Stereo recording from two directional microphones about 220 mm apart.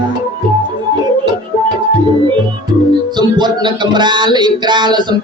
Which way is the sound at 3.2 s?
20° right (ahead or behind).